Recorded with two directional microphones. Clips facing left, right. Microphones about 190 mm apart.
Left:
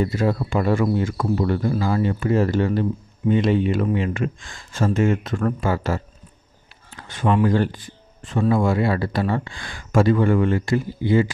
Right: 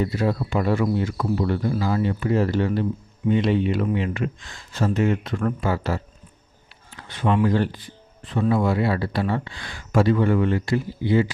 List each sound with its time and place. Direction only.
0.0 s speech: 50° left (ahead or behind)